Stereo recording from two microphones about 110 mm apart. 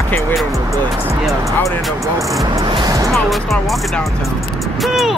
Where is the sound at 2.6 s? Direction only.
40° right (ahead or behind).